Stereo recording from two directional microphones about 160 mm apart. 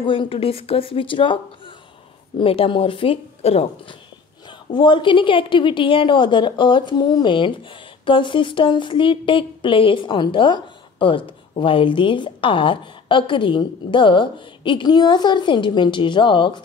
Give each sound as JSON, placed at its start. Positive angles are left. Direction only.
{"t": 0.0, "sound": "a woman's voice", "side_deg": 30}